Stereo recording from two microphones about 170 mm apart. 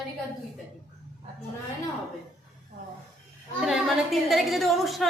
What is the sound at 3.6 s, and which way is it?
A woman's voice, centre (ahead or behind).